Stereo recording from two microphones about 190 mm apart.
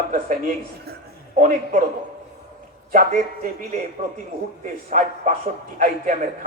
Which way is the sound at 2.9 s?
40° right (ahead or behind).